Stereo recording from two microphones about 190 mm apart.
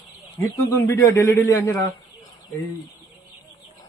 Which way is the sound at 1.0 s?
15° left (ahead or behind).